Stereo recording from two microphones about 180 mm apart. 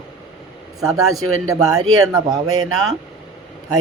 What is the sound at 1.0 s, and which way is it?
Speech, 20° right (ahead or behind).